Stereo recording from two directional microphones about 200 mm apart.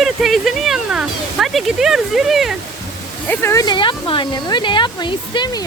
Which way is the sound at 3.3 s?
10° left (ahead or behind).